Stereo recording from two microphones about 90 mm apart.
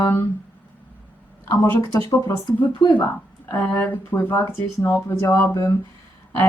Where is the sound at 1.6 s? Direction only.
30° left (ahead or behind).